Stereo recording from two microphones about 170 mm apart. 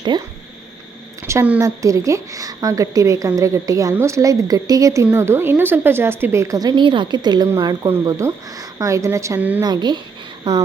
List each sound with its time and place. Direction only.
0.1 s a woman's voice: 30° right (ahead or behind)
1.2 s a woman's voice: 15° right (ahead or behind)
9.6 s a woman's voice: 25° right (ahead or behind)